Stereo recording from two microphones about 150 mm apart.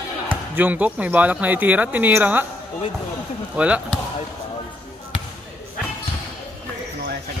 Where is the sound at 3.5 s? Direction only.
10° right (ahead or behind).